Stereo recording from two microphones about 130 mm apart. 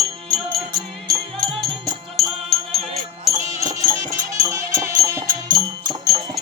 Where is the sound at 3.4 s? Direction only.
25° right (ahead or behind).